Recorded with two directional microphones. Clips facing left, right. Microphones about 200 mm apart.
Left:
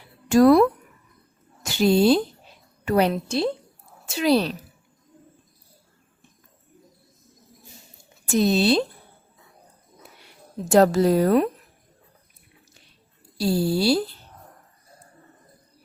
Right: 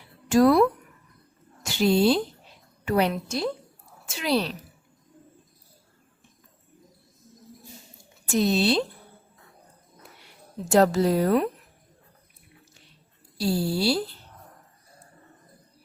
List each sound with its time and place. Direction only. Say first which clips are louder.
0.3 s speech: left 4 dB; 45° left (ahead or behind)
1.6 s a woman's voice: left 3 dB; 40° left (ahead or behind); by 3.6 s 25° left (ahead or behind)
4.1 s a woman's voice: left 5 dB; 40° left (ahead or behind)
8.4 s a woman's voice: left 3 dB; 40° left (ahead or behind)
10.7 s speech: left 3 dB; 45° left (ahead or behind)
13.4 s speech: left 3 dB; 45° left (ahead or behind)